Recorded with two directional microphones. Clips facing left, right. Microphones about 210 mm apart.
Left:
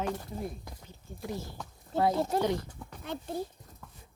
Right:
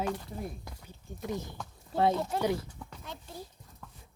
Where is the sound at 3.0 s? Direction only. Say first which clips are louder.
Left 11 dB; 60° left (ahead or behind).